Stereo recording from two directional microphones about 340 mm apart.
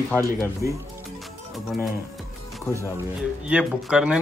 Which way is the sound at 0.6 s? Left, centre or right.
Left.